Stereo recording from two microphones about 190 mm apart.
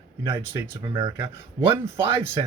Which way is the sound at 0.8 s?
25° right (ahead or behind).